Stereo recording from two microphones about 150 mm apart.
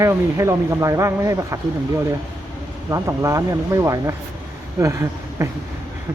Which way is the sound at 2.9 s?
20° right (ahead or behind).